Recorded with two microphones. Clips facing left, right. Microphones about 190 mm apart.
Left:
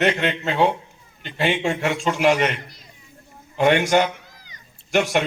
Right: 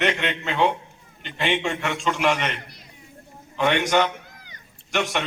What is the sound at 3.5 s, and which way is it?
Speech, 45° left (ahead or behind).